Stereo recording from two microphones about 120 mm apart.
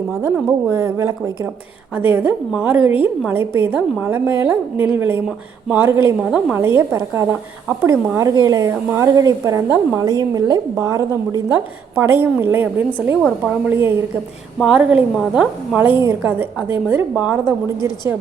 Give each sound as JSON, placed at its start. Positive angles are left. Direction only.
{"t": 0.7, "sound": "a woman's voice", "side_deg": -25}
{"t": 5.9, "sound": "a woman's voice", "side_deg": -25}
{"t": 11.9, "sound": "a woman's voice", "side_deg": -20}